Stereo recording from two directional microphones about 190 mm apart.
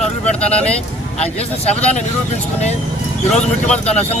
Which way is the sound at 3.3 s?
5° left (ahead or behind).